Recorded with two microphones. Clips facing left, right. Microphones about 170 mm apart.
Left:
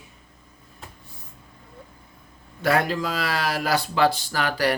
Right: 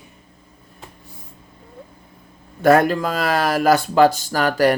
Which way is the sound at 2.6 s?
45° right (ahead or behind).